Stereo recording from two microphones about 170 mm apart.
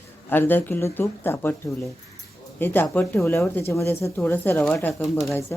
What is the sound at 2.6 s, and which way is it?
Speech, 10° left (ahead or behind).